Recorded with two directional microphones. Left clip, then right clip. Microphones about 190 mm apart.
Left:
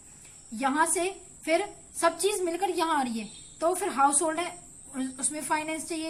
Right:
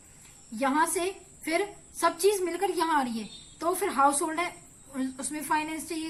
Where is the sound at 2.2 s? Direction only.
40° left (ahead or behind).